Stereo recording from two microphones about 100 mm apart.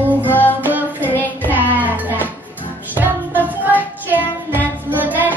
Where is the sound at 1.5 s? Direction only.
15° right (ahead or behind).